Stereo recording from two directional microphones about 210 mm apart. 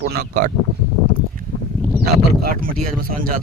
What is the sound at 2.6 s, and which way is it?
Speech, 40° right (ahead or behind).